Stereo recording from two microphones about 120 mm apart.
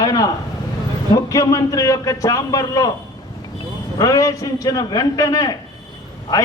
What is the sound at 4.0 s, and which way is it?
A man's voice, 30° left (ahead or behind).